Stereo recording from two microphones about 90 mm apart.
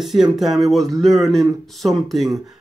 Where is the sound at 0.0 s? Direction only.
5° right (ahead or behind).